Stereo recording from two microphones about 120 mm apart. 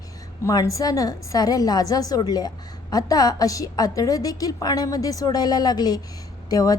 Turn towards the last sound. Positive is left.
turn(degrees=30)  # may be behind; listen again after turning